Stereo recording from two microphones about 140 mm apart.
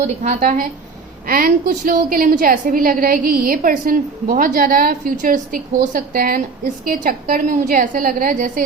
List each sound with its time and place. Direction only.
0.2 s speech: 65° right (ahead or behind)
1.3 s a woman's voice: 90° right